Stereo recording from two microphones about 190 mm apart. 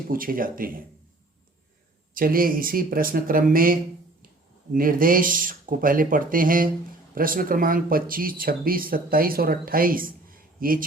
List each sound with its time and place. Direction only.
0.1 s speech: 50° right (ahead or behind)
2.1 s speech: 50° right (ahead or behind)